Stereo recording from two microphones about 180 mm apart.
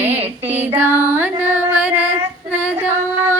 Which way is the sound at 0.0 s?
10° right (ahead or behind).